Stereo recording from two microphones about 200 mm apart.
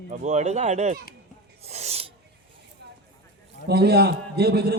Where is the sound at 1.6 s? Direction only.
30° right (ahead or behind).